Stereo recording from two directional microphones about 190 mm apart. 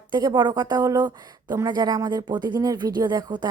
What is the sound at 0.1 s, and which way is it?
Speech, 20° right (ahead or behind).